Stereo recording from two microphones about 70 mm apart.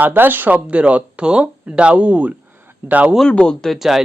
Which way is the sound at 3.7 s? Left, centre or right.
Centre.